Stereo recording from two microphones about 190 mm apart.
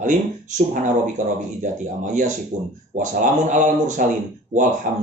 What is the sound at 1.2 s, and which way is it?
A man's voice, 40° right (ahead or behind).